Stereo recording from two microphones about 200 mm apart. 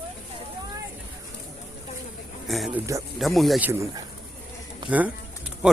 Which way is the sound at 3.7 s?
15° right (ahead or behind).